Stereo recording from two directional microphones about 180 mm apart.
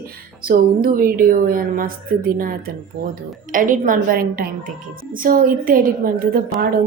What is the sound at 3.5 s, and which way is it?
A woman's voice, 50° right (ahead or behind).